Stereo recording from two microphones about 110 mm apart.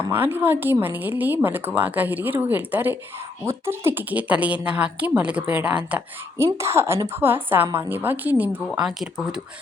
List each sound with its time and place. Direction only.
0.1 s a woman's voice: 20° right (ahead or behind)
6.3 s a woman's voice: 25° right (ahead or behind)
8.7 s a woman's voice: 5° right (ahead or behind)